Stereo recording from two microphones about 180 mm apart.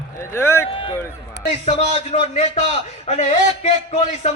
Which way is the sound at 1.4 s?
70° left (ahead or behind).